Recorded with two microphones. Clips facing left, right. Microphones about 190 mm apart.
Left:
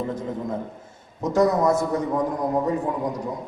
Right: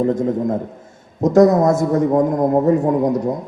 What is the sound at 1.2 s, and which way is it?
A man's voice, 45° right (ahead or behind).